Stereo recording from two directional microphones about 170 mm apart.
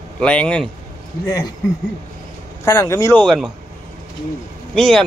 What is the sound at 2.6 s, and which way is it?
Speech, 20° left (ahead or behind).